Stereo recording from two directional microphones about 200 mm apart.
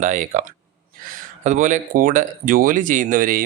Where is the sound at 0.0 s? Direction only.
40° right (ahead or behind).